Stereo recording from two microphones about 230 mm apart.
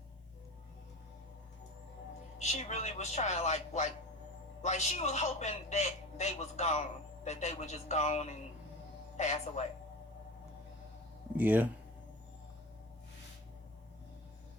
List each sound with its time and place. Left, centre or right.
2.4 s a man's voice: left
11.3 s speech: centre